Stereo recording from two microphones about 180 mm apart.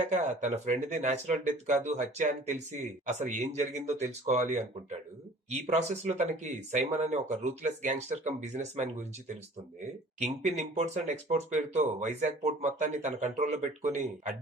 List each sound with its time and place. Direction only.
0.1 s speech: 40° right (ahead or behind)
10.2 s speech: 40° right (ahead or behind)